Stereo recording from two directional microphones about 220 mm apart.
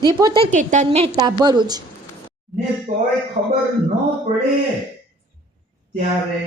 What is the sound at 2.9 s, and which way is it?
Speech, 35° right (ahead or behind).